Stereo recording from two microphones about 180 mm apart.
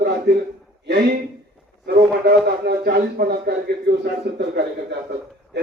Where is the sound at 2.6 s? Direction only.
60° right (ahead or behind).